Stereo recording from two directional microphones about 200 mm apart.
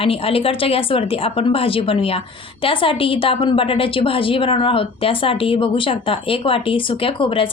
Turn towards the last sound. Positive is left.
turn(degrees=25)  # may be behind; listen again after turning